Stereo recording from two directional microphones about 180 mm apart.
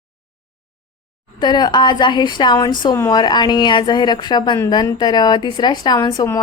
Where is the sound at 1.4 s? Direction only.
25° left (ahead or behind).